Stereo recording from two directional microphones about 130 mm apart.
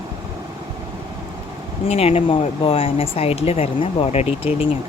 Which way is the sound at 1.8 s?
50° left (ahead or behind).